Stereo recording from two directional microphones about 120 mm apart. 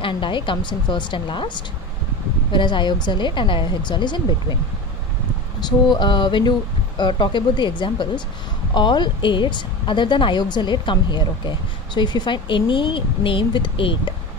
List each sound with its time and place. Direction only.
0.0 s speech: 45° left (ahead or behind)
5.6 s speech: 35° left (ahead or behind)